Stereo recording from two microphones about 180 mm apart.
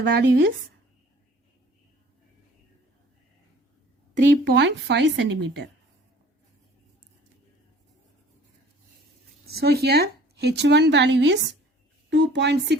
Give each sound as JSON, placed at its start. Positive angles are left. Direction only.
{"t": 0.0, "sound": "speech", "side_deg": -85}
{"t": 4.5, "sound": "speech", "side_deg": -80}
{"t": 9.5, "sound": "speech", "side_deg": -60}